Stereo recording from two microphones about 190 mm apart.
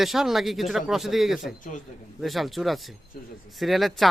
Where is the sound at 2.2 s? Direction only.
Centre (ahead or behind).